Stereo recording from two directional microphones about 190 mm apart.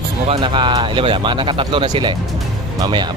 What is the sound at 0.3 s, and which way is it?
Speech, 25° right (ahead or behind).